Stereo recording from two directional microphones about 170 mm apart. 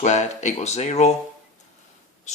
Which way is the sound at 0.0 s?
45° left (ahead or behind).